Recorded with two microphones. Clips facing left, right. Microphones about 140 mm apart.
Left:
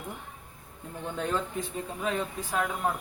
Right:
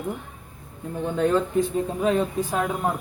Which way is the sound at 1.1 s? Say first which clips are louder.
Right 9 dB; 65° right (ahead or behind).